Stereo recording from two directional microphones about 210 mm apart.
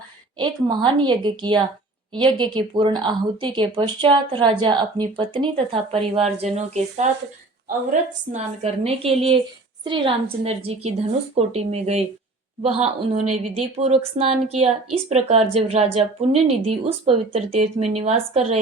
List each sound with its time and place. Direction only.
0.3 s a woman's voice: 20° right (ahead or behind)
8.3 s a woman's voice: 30° right (ahead or behind)